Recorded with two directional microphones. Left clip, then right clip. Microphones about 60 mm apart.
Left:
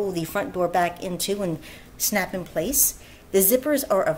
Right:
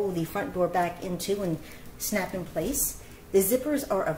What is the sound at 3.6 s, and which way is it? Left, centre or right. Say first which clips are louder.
Speech: left 6 dB; left.